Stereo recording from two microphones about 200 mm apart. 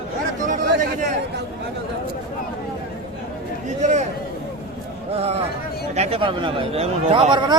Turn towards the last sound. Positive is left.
turn(degrees=-25)  # may be behind; listen again after turning